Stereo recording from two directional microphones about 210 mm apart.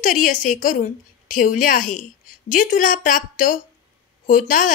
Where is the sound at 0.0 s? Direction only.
40° left (ahead or behind).